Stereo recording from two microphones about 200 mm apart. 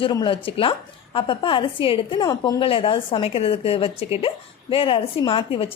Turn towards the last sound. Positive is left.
turn(degrees=30)  # may be behind; listen again after turning